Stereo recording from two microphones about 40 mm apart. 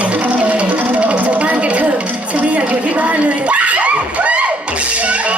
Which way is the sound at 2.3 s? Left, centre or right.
Right.